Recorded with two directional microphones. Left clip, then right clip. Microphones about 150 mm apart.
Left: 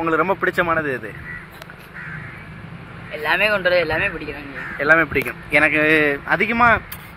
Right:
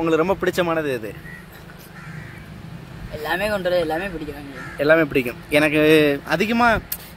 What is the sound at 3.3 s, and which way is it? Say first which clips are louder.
Speech: left 4 dB; 20° right (ahead or behind).